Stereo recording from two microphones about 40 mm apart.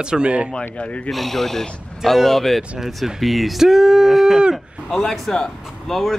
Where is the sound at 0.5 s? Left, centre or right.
Left.